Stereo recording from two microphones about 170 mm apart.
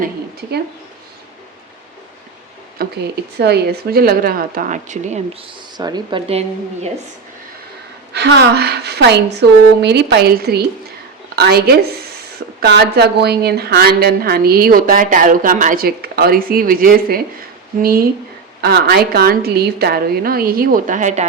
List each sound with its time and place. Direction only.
0.0 s speech: 70° right (ahead or behind)
2.7 s a woman's voice: 75° right (ahead or behind); by 5.4 s 45° right (ahead or behind)
5.7 s speech: 25° right (ahead or behind)
8.1 s a woman's voice: 75° right (ahead or behind); by 21.2 s 45° right (ahead or behind)